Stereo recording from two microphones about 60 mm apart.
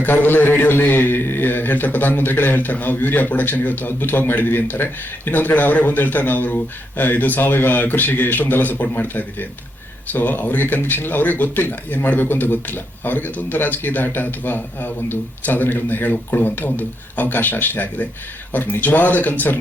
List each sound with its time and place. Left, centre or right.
0.0 s a man's voice: left